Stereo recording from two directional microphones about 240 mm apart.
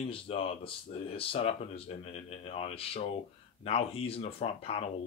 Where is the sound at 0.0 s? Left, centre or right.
Left.